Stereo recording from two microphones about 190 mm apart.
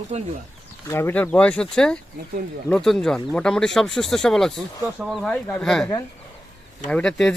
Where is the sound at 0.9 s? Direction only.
10° left (ahead or behind).